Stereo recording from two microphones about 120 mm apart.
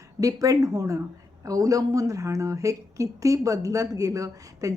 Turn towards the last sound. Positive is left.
turn(degrees=-30)  # may be behind; listen again after turning